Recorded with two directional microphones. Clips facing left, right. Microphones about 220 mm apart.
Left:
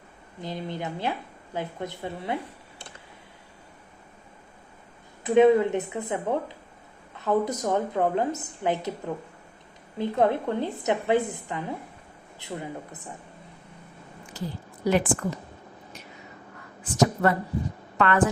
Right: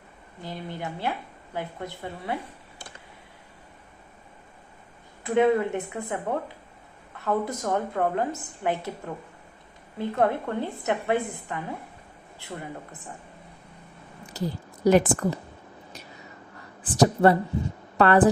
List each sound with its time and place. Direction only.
0.4 s a woman's voice: 20° left (ahead or behind)
5.2 s a woman's voice: 20° left (ahead or behind)
10.0 s a woman's voice: 20° left (ahead or behind)
14.3 s a woman's voice: 40° right (ahead or behind)
16.8 s a woman's voice: 35° right (ahead or behind)